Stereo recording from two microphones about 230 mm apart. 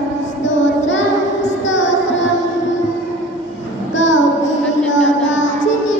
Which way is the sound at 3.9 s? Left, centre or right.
Left.